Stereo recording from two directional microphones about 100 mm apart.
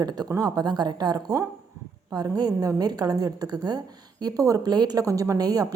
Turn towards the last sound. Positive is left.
turn(degrees=-35)  # may be behind; listen again after turning